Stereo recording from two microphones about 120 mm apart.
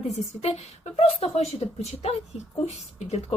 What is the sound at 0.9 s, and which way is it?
Speech, 60° left (ahead or behind).